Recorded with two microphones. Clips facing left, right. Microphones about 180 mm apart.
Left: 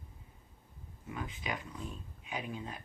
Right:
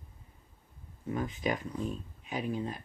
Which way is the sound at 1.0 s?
45° right (ahead or behind).